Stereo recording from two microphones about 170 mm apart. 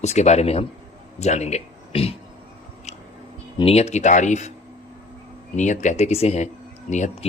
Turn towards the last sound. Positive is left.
turn(degrees=45)  # may be behind; listen again after turning